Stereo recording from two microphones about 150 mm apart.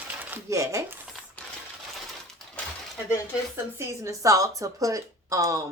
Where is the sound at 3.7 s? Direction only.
20° right (ahead or behind).